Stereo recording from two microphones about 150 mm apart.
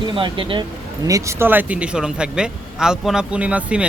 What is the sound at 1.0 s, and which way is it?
Speech, 20° right (ahead or behind).